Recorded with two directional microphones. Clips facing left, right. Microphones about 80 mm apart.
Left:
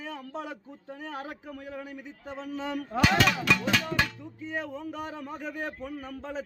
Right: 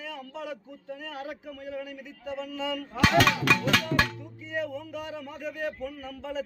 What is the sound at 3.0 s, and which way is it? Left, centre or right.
Speech, right.